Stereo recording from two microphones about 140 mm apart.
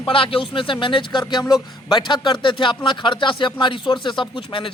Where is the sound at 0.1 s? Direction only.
40° left (ahead or behind).